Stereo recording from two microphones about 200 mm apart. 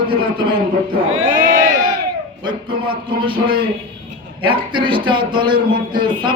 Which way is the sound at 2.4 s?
25° right (ahead or behind).